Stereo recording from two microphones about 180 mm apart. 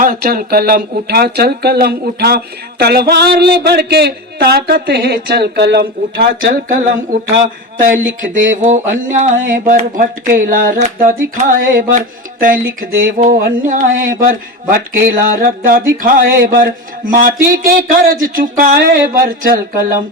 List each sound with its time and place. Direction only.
0.0 s speech: 55° right (ahead or behind)
7.4 s speech: 45° right (ahead or behind)